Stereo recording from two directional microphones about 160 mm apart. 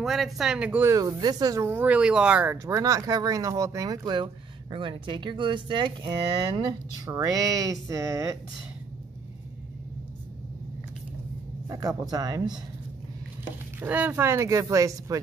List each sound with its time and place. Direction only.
0.0 s speech: centre (ahead or behind); by 8.4 s 20° right (ahead or behind)
11.7 s speech: 25° right (ahead or behind)
13.7 s speech: 10° right (ahead or behind)